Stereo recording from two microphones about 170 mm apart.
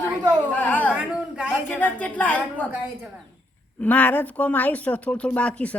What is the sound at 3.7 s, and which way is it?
Speech, 10° left (ahead or behind).